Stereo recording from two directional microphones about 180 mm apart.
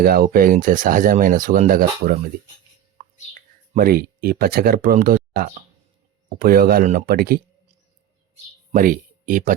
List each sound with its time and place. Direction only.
0.0 s speech: 55° right (ahead or behind)
3.0 s a sound: 40° right (ahead or behind)
3.8 s speech: 55° right (ahead or behind)
8.7 s speech: 50° right (ahead or behind)